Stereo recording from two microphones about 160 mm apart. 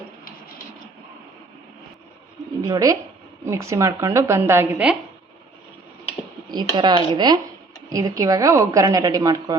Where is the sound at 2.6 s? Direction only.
20° right (ahead or behind).